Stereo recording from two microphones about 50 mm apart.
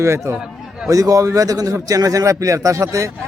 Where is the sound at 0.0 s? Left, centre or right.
Right.